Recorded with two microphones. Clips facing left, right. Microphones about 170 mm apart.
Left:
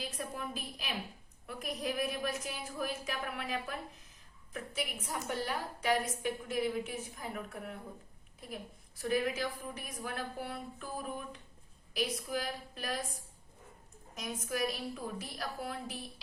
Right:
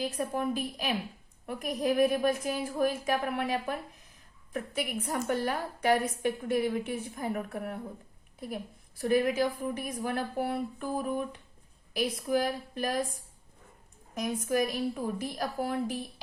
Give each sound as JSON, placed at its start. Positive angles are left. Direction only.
{"t": 0.0, "sound": "a woman's voice", "side_deg": -50}
{"t": 9.0, "sound": "a woman's voice", "side_deg": -55}
{"t": 14.2, "sound": "a woman's voice", "side_deg": -55}